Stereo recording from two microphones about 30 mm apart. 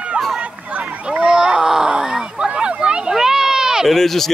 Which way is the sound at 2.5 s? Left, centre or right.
Right.